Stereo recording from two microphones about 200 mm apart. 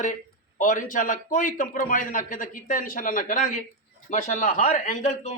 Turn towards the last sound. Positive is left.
turn(degrees=40)  # may be behind; listen again after turning